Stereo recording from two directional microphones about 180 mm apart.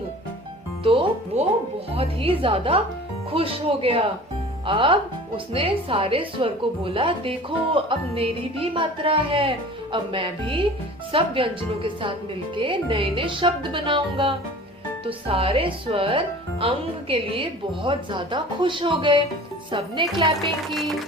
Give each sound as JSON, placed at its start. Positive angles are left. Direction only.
{"t": 0.9, "sound": "a woman's voice", "side_deg": -30}